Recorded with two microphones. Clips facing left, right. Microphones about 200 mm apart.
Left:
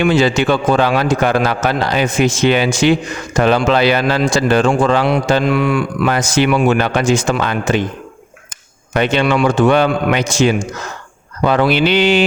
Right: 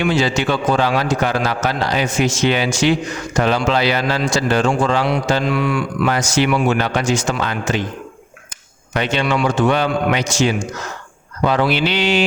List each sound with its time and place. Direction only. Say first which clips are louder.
0.0 s speech: left 4 dB; 55° left (ahead or behind)
8.9 s speech: left 4 dB; 55° left (ahead or behind)